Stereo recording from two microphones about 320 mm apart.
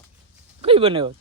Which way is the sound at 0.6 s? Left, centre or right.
Centre.